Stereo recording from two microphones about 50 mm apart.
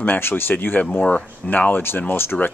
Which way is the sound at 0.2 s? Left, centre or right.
Left.